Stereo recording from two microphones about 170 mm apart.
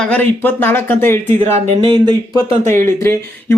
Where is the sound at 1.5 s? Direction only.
35° right (ahead or behind).